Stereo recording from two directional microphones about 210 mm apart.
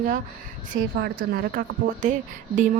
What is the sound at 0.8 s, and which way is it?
A woman's voice, 50° right (ahead or behind).